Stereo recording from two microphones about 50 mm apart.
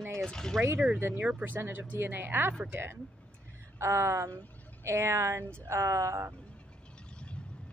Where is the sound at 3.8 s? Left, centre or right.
Right.